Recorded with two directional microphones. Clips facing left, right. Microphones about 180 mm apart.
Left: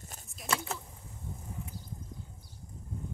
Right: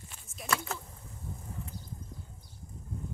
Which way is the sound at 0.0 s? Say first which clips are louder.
Left 3 dB; 40° left (ahead or behind).